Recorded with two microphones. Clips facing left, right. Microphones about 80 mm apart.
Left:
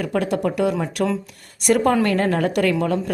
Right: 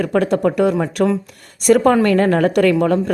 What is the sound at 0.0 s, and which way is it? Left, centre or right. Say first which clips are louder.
A woman's voice: right 5 dB; right.